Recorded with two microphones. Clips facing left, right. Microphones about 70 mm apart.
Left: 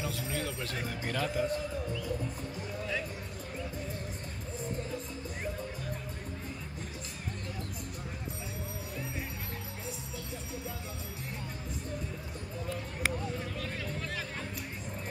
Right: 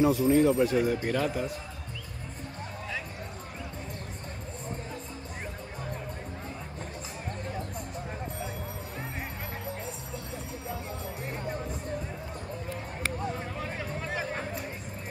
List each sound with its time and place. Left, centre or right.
0.0 s a man's voice: right; by 1.6 s centre
13.4 s music: right